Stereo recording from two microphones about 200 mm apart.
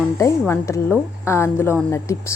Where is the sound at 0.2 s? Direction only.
15° left (ahead or behind).